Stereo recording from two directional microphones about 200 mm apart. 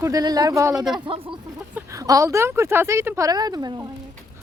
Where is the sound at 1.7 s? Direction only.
15° right (ahead or behind).